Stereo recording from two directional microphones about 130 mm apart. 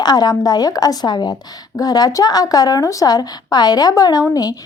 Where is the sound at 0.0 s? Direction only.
30° left (ahead or behind).